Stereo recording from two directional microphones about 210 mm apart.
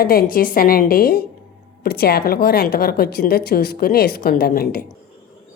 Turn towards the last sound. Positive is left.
turn(degrees=45)  # may be behind; listen again after turning